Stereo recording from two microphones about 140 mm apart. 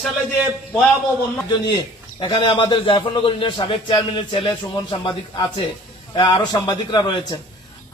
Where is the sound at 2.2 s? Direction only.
35° left (ahead or behind).